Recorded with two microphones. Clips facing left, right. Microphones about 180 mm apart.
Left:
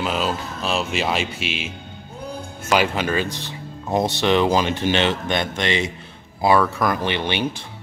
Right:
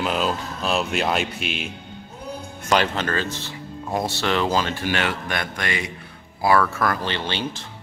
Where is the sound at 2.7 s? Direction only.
10° left (ahead or behind).